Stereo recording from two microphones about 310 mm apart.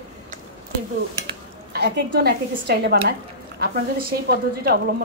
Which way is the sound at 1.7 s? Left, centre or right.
Right.